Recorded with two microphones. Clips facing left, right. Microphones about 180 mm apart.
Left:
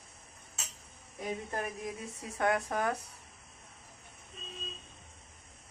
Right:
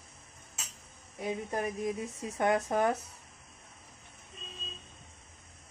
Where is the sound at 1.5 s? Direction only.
20° right (ahead or behind).